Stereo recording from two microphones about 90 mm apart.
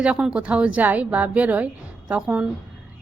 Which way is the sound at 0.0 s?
10° right (ahead or behind).